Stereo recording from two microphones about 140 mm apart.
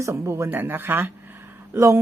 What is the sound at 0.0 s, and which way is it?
Speech, 20° right (ahead or behind).